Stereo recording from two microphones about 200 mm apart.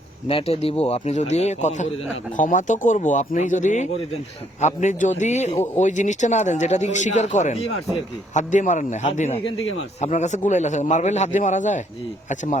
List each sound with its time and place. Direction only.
0.3 s speech: 30° left (ahead or behind)